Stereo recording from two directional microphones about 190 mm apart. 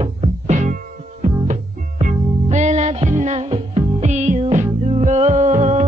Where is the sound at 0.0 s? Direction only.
35° right (ahead or behind).